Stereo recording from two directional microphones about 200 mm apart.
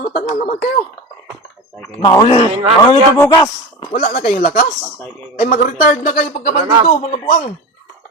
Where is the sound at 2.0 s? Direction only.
25° left (ahead or behind).